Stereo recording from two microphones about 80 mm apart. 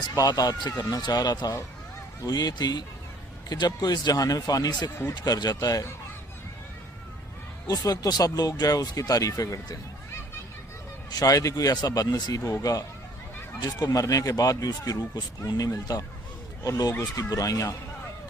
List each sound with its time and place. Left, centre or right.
0.1 s speech: left
7.7 s speech: left
11.1 s speech: left
12.4 s speech: left
13.8 s speech: left